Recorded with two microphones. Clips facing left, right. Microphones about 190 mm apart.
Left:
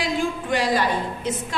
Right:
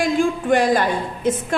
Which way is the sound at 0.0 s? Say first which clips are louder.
Right 6 dB; 50° right (ahead or behind).